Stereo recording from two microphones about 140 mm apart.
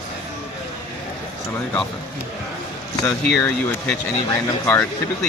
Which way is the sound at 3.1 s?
10° left (ahead or behind).